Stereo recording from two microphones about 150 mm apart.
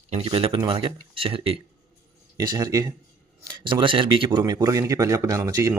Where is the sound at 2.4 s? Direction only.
25° right (ahead or behind).